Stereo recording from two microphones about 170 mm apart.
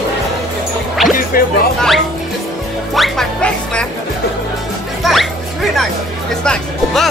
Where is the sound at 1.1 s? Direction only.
55° left (ahead or behind).